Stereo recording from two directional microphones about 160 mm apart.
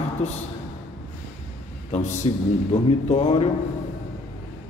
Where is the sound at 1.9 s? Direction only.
50° left (ahead or behind).